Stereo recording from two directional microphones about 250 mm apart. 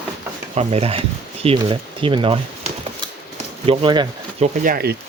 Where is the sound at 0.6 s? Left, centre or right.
Right.